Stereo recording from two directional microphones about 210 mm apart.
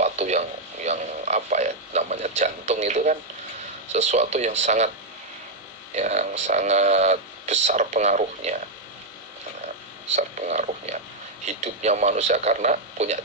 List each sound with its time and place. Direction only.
0.0 s radio: 35° right (ahead or behind)
3.9 s speech: 35° right (ahead or behind)
5.9 s speech: 35° right (ahead or behind)
10.1 s a sound: 35° right (ahead or behind)
11.4 s speech: 30° right (ahead or behind)